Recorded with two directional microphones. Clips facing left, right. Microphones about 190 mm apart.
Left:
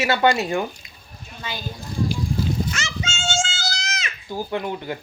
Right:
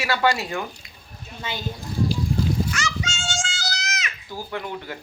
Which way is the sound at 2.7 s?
25° left (ahead or behind).